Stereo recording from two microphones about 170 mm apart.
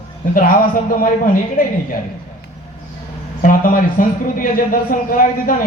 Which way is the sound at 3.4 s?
55° left (ahead or behind).